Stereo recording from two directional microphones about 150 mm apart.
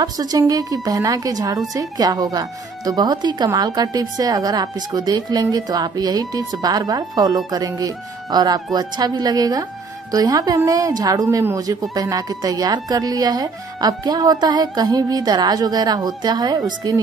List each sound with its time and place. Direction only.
0.0 s a woman's voice: 25° right (ahead or behind)